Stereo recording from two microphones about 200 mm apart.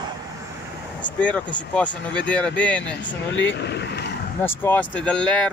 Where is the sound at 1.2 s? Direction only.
5° left (ahead or behind).